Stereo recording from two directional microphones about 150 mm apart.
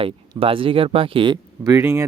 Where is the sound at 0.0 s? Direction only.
40° right (ahead or behind).